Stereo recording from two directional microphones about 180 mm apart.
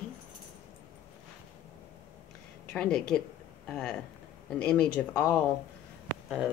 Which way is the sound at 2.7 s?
5° left (ahead or behind).